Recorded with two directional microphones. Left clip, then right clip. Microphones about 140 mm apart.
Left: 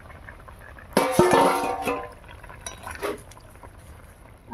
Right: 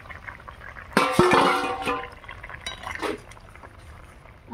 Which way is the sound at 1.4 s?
75° left (ahead or behind).